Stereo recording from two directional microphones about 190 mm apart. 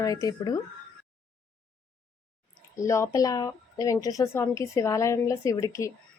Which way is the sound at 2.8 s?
15° left (ahead or behind).